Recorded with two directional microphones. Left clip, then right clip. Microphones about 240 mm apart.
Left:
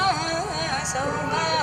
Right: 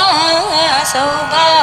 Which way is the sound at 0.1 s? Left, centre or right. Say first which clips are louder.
Right 13 dB; right.